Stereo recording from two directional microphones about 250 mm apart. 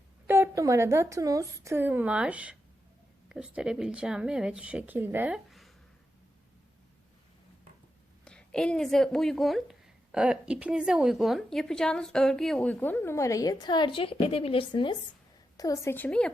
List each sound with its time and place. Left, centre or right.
0.3 s a woman's voice: centre
8.2 s a woman's voice: centre